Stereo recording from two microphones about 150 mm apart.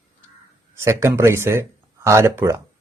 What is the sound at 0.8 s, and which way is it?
Speech, 20° right (ahead or behind).